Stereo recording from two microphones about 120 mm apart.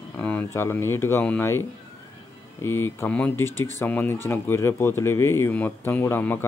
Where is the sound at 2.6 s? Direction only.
20° left (ahead or behind).